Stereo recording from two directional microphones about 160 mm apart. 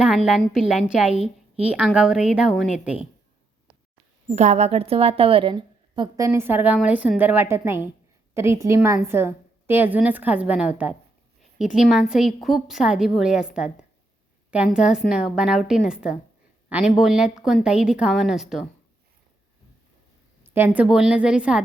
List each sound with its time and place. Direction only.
0.0 s a woman's voice: 5° right (ahead or behind)
1.1 s a sound: 40° right (ahead or behind)
1.7 s a woman's voice: 5° right (ahead or behind)
4.4 s a woman's voice: 45° right (ahead or behind); by 18.6 s centre (ahead or behind)
20.5 s a woman's voice: 10° right (ahead or behind)